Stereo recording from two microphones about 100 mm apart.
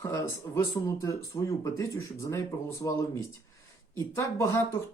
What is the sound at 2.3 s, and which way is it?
Speech, 30° left (ahead or behind).